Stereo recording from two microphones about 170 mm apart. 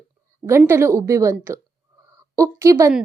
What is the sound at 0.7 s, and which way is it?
A woman's voice, 15° right (ahead or behind).